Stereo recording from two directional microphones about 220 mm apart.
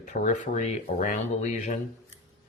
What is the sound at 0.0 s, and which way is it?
Speech, 35° left (ahead or behind).